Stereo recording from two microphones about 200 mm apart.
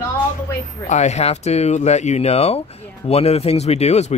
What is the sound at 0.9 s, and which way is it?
Speech, 35° left (ahead or behind).